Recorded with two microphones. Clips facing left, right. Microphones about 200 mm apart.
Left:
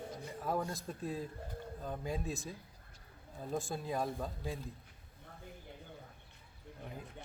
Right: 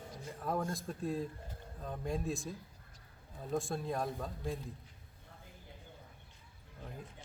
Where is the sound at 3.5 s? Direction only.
Centre (ahead or behind).